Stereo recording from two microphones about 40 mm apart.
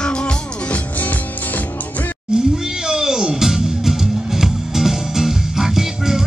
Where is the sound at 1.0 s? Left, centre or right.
Left.